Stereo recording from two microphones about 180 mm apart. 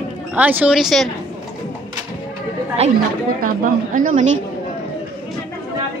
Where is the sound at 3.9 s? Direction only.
50° right (ahead or behind).